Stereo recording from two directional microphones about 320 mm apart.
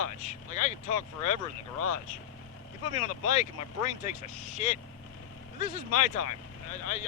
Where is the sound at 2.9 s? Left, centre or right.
Left.